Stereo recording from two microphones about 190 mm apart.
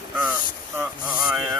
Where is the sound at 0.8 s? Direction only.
5° right (ahead or behind).